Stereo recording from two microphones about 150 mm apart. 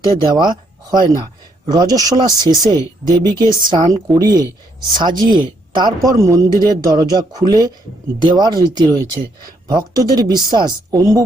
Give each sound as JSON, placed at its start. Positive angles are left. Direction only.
{"t": 0.0, "sound": "speech", "side_deg": -30}